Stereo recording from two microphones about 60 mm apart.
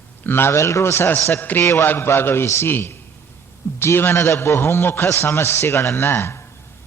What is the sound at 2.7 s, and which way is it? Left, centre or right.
A man's voice, left.